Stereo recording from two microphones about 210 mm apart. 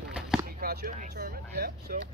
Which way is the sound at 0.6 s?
45° right (ahead or behind).